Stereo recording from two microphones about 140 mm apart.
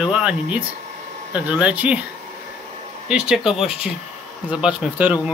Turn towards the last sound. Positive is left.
turn(degrees=-10)  # may be behind; listen again after turning